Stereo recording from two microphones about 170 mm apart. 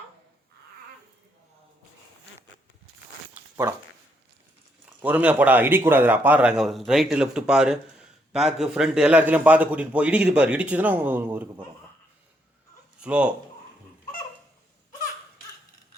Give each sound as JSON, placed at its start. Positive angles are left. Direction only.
{"t": 5.0, "sound": "a man's voice", "side_deg": -10}
{"t": 13.0, "sound": "speech", "side_deg": -5}